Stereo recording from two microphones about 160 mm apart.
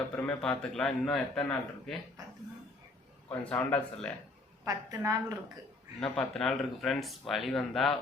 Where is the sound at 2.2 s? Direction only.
25° right (ahead or behind).